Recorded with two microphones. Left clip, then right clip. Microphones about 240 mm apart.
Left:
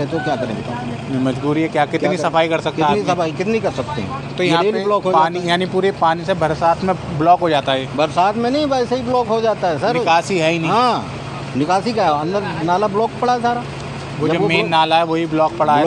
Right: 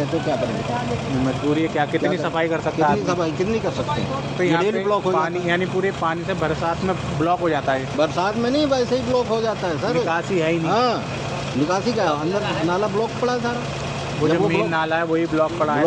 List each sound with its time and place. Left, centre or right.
1.5 s speech: left
2.6 s a man's voice: left
3.1 s speech: left